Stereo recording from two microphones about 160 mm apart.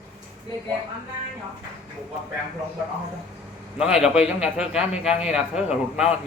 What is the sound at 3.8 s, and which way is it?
A man's voice, 5° right (ahead or behind).